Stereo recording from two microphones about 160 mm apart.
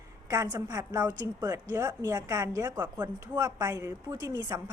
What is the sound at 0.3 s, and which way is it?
A woman's voice, 25° right (ahead or behind).